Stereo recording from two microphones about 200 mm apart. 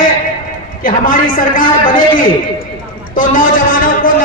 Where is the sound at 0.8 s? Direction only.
45° left (ahead or behind).